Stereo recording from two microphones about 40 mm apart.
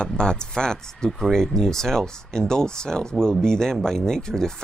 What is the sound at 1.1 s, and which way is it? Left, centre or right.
Speech, centre.